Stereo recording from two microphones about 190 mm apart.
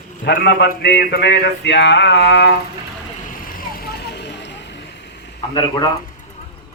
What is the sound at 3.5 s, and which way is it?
Vehicle, 50° left (ahead or behind).